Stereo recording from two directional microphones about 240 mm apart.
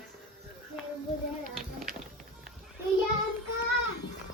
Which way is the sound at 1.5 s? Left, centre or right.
Centre.